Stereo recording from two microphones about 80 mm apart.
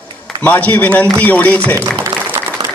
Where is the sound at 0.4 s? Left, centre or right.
Centre.